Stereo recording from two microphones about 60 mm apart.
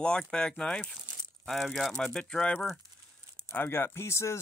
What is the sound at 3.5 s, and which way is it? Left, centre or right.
Speech, left.